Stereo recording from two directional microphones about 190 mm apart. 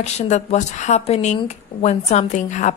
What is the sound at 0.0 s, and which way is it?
A woman's voice, 35° left (ahead or behind).